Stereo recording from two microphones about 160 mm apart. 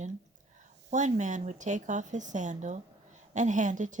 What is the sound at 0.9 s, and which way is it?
Speech, 50° right (ahead or behind).